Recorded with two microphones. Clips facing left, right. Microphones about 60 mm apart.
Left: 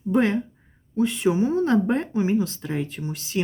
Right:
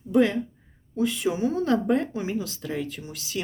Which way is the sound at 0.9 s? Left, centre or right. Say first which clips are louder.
Left 4 dB; left.